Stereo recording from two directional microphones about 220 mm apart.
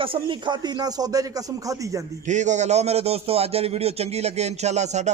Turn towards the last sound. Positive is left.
turn(degrees=-30)  # may be behind; listen again after turning